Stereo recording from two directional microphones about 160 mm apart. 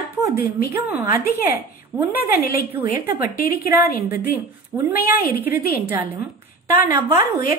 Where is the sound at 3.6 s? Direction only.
15° right (ahead or behind).